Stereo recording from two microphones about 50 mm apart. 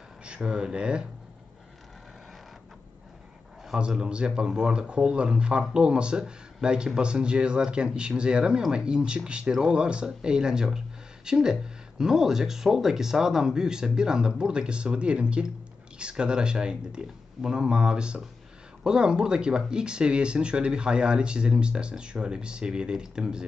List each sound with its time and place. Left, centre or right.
0.2 s speech: centre
3.7 s speech: centre